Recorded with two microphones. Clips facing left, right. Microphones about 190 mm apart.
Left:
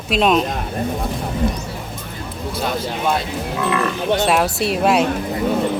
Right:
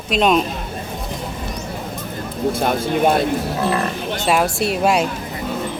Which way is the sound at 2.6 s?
50° right (ahead or behind).